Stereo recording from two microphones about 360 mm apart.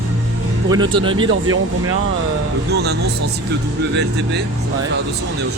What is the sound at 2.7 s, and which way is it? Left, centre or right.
Speech, right.